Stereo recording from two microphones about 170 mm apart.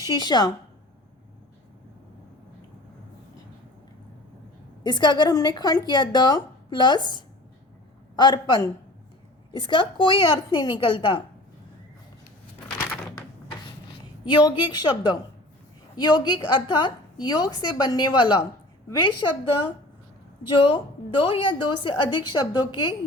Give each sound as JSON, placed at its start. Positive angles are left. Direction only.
{"t": 0.2, "sound": "a woman's voice", "side_deg": 25}
{"t": 4.8, "sound": "a woman's voice", "side_deg": 25}
{"t": 14.3, "sound": "a woman's voice", "side_deg": 25}
{"t": 20.7, "sound": "a woman's voice", "side_deg": 30}